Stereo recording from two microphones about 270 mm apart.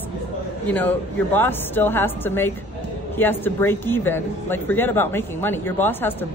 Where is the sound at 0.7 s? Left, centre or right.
Centre.